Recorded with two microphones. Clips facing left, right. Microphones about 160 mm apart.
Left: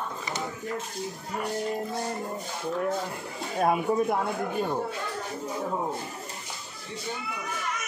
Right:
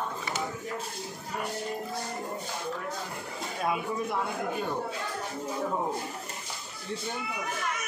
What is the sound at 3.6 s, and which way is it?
Speech, 50° left (ahead or behind).